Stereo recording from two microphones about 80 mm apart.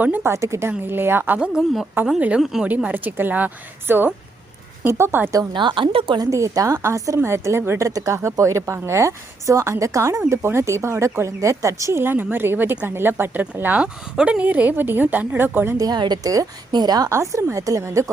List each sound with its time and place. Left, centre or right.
0.0 s speech: right
0.3 s speech: right
2.4 s speech: centre
2.6 s speech: right
5.5 s speech: right
6.1 s speech: right
7.9 s speech: right
15.8 s speech: right
17.1 s speech: right